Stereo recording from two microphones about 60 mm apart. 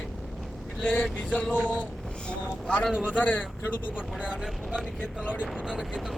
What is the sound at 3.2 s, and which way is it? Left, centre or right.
Speech, left.